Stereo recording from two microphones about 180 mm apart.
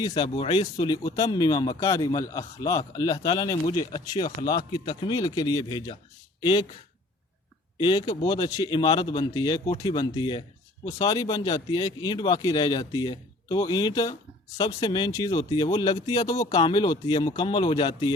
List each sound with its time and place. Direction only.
0.0 s speech: 25° left (ahead or behind)
7.8 s speech: 25° left (ahead or behind)